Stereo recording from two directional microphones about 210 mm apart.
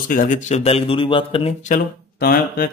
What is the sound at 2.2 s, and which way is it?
Speech, 45° left (ahead or behind).